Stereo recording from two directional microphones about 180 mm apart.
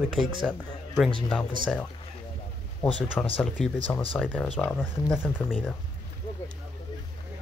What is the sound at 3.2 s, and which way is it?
Speech, 10° left (ahead or behind).